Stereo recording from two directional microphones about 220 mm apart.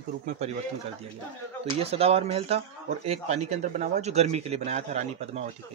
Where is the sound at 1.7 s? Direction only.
25° right (ahead or behind).